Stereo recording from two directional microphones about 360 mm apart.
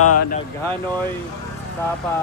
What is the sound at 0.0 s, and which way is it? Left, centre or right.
Speech, left.